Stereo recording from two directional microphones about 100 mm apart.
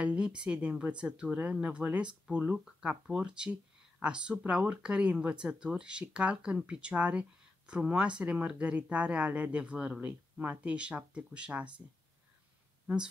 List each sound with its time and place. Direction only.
0.0 s speech: 10° right (ahead or behind)